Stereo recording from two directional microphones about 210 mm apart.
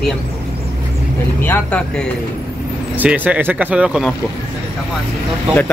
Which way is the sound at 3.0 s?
5° right (ahead or behind).